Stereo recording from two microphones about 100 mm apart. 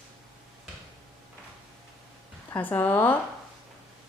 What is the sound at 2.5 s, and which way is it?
Speech, 15° left (ahead or behind).